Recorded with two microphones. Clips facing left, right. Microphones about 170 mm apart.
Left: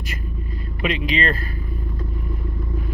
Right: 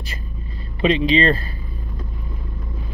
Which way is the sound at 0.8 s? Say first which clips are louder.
Right 6 dB; 30° right (ahead or behind).